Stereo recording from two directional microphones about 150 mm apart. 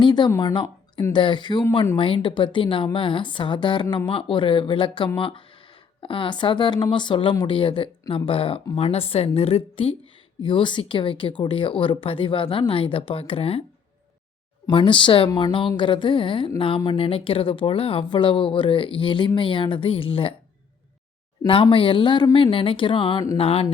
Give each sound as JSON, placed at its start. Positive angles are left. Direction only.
{"t": 0.0, "sound": "speech", "side_deg": 30}
{"t": 14.7, "sound": "speech", "side_deg": 35}
{"t": 21.4, "sound": "speech", "side_deg": 35}